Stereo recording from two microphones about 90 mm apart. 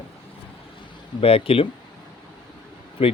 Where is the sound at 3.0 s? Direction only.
90° left.